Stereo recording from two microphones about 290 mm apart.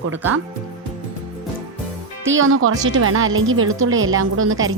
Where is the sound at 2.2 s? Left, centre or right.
Right.